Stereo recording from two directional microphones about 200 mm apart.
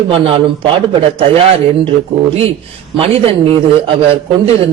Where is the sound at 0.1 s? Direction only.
25° right (ahead or behind).